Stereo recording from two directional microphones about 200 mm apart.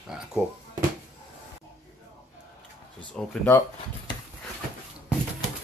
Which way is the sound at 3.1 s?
10° left (ahead or behind).